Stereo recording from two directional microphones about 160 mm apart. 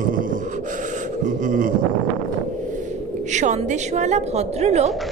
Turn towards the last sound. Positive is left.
turn(degrees=-45)  # may be behind; listen again after turning